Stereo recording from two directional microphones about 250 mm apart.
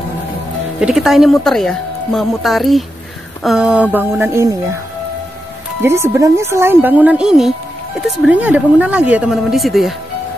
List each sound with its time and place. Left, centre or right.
0.7 s speech: centre
5.8 s speech: centre